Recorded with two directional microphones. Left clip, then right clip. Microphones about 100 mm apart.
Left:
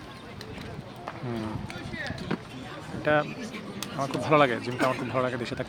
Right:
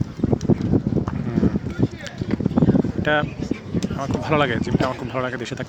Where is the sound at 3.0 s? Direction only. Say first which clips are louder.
Right 2 dB; 30° right (ahead or behind).